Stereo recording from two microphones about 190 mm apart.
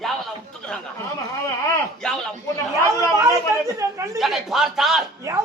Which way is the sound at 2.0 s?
5° left (ahead or behind).